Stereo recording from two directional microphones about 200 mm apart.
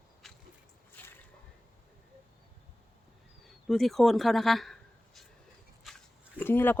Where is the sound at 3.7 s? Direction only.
Centre (ahead or behind).